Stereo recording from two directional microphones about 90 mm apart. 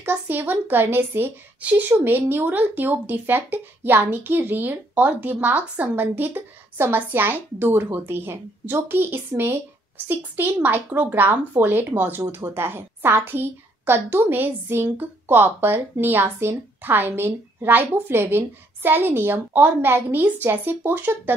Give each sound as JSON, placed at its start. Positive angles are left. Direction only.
{"t": 0.0, "sound": "a woman's voice", "side_deg": -20}